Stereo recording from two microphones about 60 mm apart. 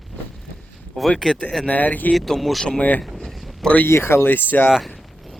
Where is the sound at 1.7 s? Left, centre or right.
Left.